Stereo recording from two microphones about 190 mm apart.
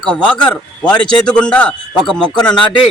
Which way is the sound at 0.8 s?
25° left (ahead or behind).